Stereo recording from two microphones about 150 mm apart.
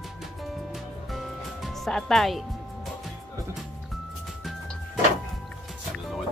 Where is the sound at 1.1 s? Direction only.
Centre (ahead or behind).